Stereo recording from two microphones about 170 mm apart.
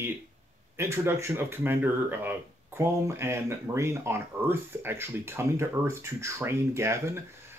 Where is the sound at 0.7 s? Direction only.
15° right (ahead or behind).